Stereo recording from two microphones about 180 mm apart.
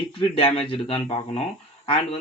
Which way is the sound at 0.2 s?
30° left (ahead or behind).